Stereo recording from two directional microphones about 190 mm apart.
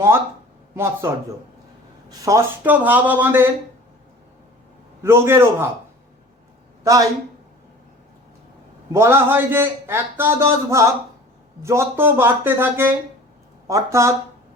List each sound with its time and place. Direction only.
1.0 s a man's voice: 10° right (ahead or behind)
5.0 s a man's voice: 10° right (ahead or behind)
6.8 s a man's voice: 15° right (ahead or behind)
8.9 s a man's voice: 15° right (ahead or behind)